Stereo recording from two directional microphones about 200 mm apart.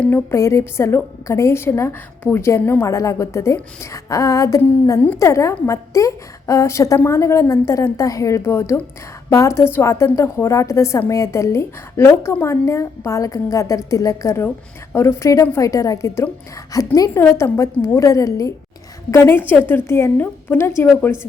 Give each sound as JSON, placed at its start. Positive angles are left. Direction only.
{"t": 0.0, "sound": "a woman's voice", "side_deg": 10}